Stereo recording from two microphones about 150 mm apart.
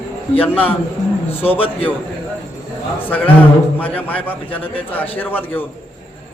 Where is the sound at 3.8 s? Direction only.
10° left (ahead or behind).